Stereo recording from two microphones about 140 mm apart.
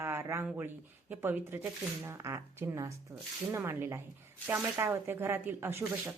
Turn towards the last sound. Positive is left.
turn(degrees=-15)  # may be behind; listen again after turning